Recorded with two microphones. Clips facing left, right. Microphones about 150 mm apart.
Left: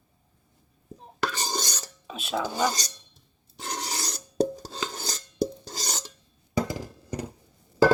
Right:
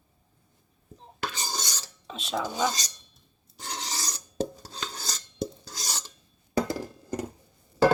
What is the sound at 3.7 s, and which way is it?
Filing, 60° left (ahead or behind).